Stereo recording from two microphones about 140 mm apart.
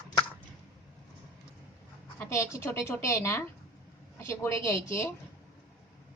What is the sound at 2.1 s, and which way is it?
A woman's voice, 20° left (ahead or behind).